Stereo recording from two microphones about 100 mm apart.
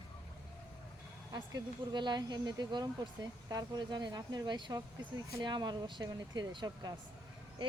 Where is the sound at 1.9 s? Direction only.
45° right (ahead or behind).